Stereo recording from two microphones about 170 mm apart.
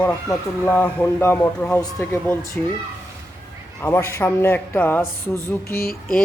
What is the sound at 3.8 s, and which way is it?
Speech, 15° left (ahead or behind).